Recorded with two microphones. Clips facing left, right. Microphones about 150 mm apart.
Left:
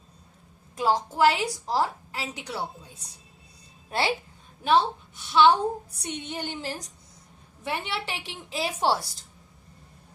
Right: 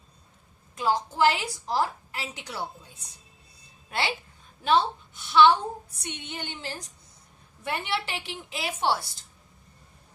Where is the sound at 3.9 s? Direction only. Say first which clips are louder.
Left 3 dB; 35° left (ahead or behind).